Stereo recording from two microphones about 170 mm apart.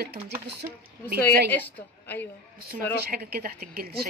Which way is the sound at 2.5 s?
60° right (ahead or behind).